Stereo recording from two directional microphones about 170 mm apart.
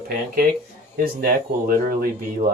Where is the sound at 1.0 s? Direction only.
65° right (ahead or behind).